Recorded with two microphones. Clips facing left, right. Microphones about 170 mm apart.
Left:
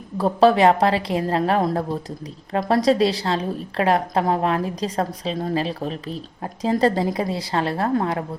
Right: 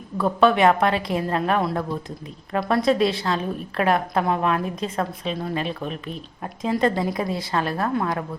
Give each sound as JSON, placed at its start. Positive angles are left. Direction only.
{"t": 0.2, "sound": "a woman's voice", "side_deg": 30}